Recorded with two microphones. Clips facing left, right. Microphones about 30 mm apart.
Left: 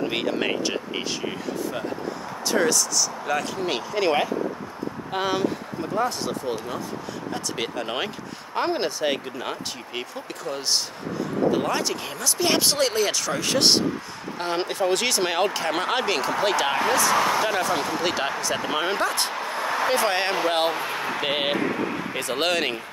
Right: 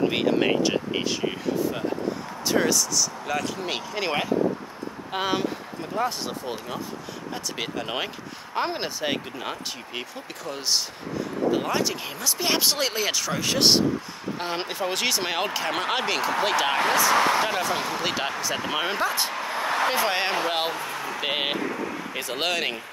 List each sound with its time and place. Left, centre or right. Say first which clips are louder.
0.0 s speech: right 3 dB; centre
7.3 s speech: left 1 dB; centre
17.1 s speech: even; right
17.5 s speech: left 2 dB; centre
19.3 s a sound: even; centre
19.9 s speech: left 2 dB; centre
20.7 s speech: left 3 dB; left
21.2 s speech: left 1 dB; centre
21.5 s vehicle: left 4 dB; left
22.1 s speech: left 2 dB; centre